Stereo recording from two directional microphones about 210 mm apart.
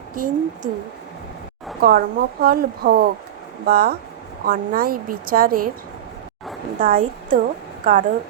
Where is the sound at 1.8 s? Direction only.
45° right (ahead or behind).